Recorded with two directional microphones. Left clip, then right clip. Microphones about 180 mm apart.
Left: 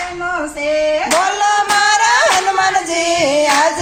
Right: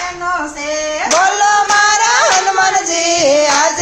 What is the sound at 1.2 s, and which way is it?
Music, 10° left (ahead or behind).